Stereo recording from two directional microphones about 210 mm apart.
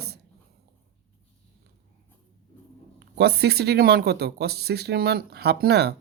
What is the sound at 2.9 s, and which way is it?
Speech, 55° right (ahead or behind).